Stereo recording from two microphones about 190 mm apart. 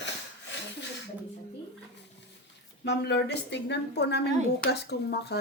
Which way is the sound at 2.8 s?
65° left (ahead or behind).